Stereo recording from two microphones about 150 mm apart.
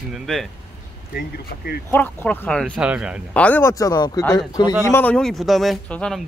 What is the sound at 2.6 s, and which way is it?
Speech, 5° right (ahead or behind).